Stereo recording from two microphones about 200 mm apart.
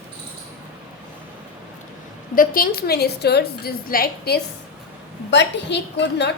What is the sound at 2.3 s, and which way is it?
A woman's voice, 45° left (ahead or behind).